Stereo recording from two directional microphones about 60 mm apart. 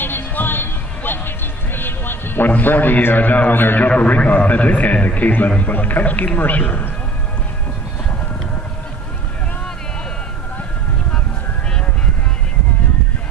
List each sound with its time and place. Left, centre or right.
0.0 s music: left
3.9 s a man's voice: centre